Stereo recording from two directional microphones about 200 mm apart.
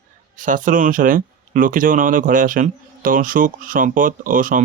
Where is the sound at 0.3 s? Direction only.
40° right (ahead or behind).